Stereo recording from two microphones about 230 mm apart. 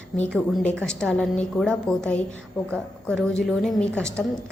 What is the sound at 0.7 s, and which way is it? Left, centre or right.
A woman's voice, centre.